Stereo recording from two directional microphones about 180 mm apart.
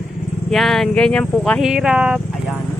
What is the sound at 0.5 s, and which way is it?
Speech, centre (ahead or behind).